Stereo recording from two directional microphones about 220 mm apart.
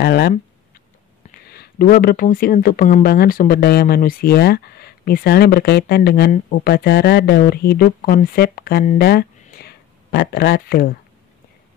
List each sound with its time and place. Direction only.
0.0 s speech: 45° left (ahead or behind)
1.5 s speech: 45° left (ahead or behind)